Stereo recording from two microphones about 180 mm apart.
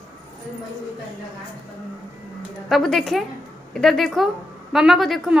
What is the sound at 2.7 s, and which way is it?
A woman's voice, centre (ahead or behind).